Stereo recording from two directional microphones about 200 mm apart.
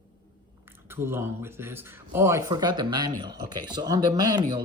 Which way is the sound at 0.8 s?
10° right (ahead or behind).